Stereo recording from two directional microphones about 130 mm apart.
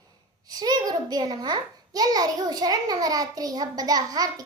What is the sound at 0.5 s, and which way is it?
A child's voice, 30° right (ahead or behind).